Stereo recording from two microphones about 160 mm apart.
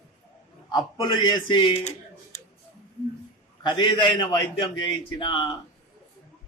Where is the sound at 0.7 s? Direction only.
25° left (ahead or behind).